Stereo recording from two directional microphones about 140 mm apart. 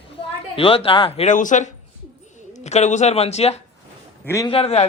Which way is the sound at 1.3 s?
65° left (ahead or behind).